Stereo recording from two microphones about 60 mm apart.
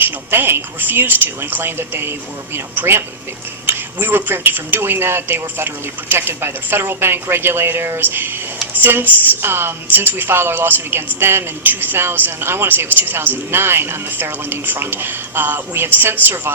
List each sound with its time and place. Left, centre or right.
0.0 s a woman's voice: right